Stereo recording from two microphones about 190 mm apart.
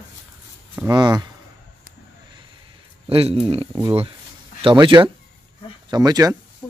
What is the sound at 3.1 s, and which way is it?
Speech, 30° right (ahead or behind).